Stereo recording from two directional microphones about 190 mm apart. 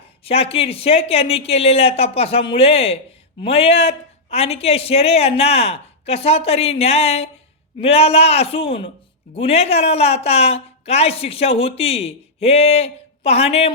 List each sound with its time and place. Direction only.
0.3 s speech: 30° left (ahead or behind)